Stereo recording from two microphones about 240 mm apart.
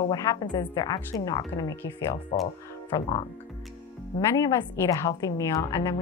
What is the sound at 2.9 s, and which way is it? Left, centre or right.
Speech, left.